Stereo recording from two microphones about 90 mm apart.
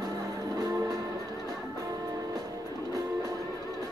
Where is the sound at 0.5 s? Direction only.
40° right (ahead or behind).